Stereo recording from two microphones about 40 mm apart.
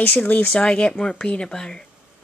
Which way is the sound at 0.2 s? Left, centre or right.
Left.